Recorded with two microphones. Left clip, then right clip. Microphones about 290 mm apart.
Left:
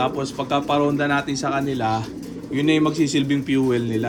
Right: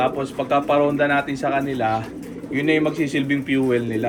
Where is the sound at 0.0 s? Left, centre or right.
Centre.